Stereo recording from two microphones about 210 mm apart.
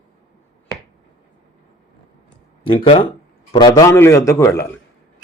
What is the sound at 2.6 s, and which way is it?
A man's voice, 25° left (ahead or behind).